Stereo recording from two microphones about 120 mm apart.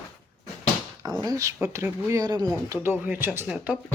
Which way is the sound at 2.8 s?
15° right (ahead or behind).